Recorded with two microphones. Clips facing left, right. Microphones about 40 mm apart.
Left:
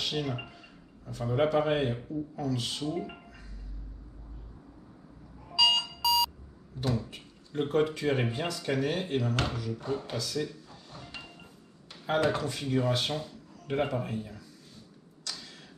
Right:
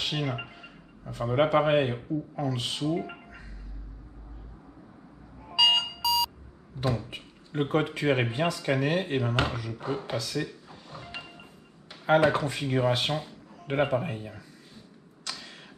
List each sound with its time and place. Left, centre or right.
0.0 s speech: right
5.5 s a sound: right
5.9 s beep: centre
6.8 s speech: right
8.5 s speech: right
15.2 s tick-tock: right